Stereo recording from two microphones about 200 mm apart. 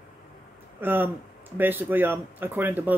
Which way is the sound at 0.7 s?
10° right (ahead or behind).